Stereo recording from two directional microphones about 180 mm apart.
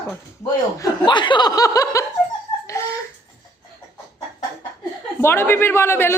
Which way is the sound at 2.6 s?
15° left (ahead or behind).